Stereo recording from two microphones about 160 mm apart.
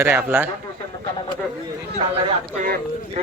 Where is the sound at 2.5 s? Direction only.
60° right (ahead or behind).